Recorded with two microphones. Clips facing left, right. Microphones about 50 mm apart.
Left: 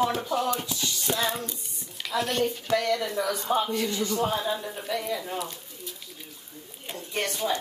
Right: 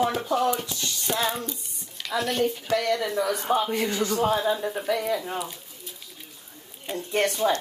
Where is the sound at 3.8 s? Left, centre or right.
Right.